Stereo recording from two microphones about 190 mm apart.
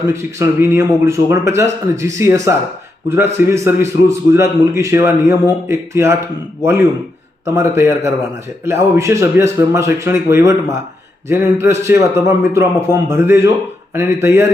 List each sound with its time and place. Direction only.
0.0 s a man's voice: 15° right (ahead or behind)